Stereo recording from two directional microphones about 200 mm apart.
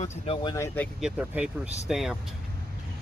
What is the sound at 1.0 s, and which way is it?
Speech, 5° right (ahead or behind).